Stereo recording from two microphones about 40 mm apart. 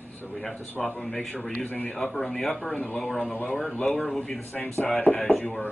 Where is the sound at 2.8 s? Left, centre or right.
Left.